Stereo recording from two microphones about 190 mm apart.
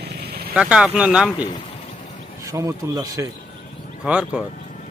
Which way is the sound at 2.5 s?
15° right (ahead or behind).